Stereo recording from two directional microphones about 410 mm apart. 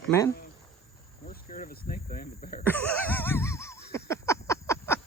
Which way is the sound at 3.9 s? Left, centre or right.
Centre.